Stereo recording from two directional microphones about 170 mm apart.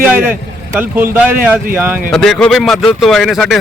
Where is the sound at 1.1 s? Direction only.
10° right (ahead or behind).